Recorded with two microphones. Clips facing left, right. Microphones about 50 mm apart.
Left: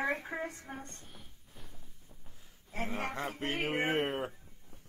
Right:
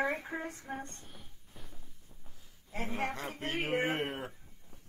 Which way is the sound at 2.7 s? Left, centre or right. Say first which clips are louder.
Even; left.